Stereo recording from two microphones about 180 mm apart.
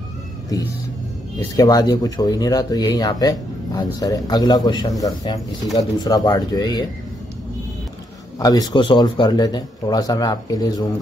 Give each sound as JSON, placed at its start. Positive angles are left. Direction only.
{"t": 1.6, "sound": "speech", "side_deg": 20}
{"t": 8.4, "sound": "speech", "side_deg": 20}